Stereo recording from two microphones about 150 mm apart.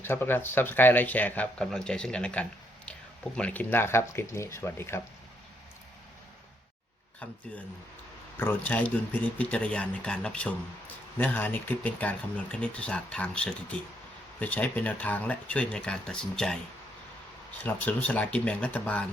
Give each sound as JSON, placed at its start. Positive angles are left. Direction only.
{"t": 0.0, "sound": "speech", "side_deg": 15}
{"t": 8.4, "sound": "speech", "side_deg": 10}
{"t": 17.6, "sound": "speech", "side_deg": 10}